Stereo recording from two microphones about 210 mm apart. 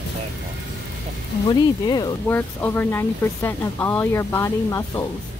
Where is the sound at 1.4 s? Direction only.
20° left (ahead or behind).